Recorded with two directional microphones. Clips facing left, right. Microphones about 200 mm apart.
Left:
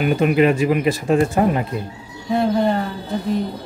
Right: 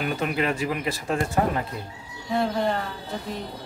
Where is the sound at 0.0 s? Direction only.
15° left (ahead or behind).